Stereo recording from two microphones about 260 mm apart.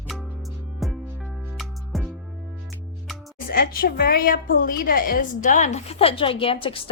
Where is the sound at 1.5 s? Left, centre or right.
Centre.